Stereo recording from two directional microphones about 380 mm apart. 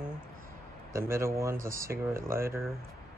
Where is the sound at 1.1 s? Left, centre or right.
Centre.